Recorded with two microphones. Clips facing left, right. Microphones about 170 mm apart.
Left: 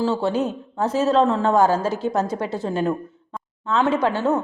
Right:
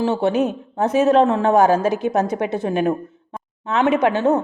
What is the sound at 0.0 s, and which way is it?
A woman's voice, 20° right (ahead or behind).